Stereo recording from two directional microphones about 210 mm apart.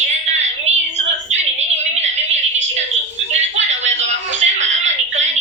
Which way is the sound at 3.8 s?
60° right (ahead or behind).